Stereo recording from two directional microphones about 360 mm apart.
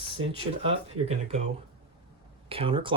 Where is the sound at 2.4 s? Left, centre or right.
Centre.